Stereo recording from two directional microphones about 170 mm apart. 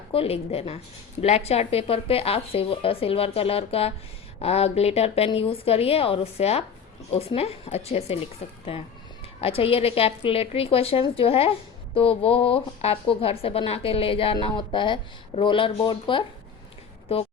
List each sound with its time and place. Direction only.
0.1 s a woman's voice: 35° left (ahead or behind)